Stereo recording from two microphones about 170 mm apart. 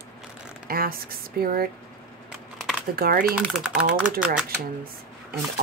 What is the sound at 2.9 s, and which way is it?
Speech, 60° right (ahead or behind).